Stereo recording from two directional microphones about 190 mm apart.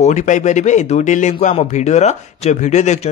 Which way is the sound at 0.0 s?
40° left (ahead or behind).